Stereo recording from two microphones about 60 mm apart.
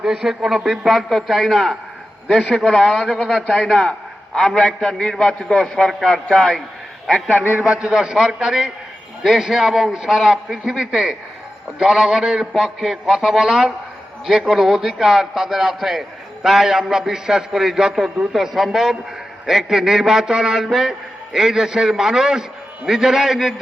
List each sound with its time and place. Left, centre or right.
0.0 s a man's voice: centre
2.2 s a man's voice: centre
2.6 s a man's voice: centre
7.6 s a man's voice: centre